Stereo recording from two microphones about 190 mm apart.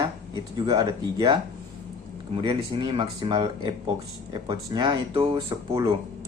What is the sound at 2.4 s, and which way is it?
Speech, 25° right (ahead or behind).